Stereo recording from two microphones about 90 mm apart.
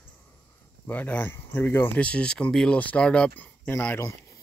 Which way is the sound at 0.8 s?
20° left (ahead or behind).